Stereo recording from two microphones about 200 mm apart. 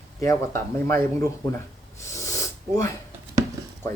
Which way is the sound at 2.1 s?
15° left (ahead or behind).